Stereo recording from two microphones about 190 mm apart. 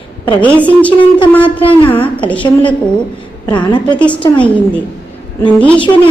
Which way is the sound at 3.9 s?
5° left (ahead or behind).